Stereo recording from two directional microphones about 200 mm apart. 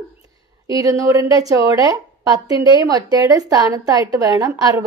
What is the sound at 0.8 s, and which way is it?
Speech, 15° right (ahead or behind).